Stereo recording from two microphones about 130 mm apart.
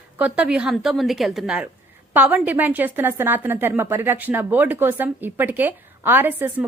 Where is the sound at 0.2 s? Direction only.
10° right (ahead or behind).